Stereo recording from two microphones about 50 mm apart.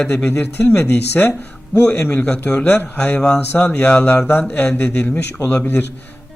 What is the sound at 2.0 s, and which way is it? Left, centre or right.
Speech, left.